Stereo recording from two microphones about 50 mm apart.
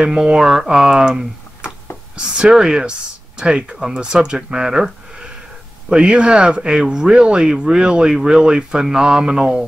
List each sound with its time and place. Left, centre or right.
0.0 s speech: centre